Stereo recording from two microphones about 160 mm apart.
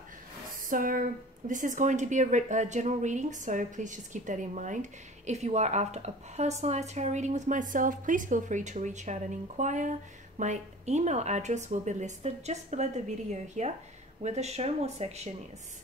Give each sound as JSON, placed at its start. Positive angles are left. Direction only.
{"t": 0.7, "sound": "speech", "side_deg": -60}